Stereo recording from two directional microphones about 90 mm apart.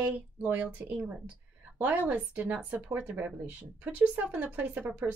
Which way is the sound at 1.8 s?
20° right (ahead or behind).